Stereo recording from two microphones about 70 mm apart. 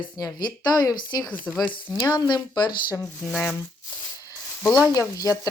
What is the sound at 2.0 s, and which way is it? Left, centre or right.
Speech, left.